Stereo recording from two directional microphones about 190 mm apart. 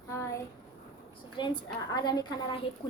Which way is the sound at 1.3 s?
25° left (ahead or behind).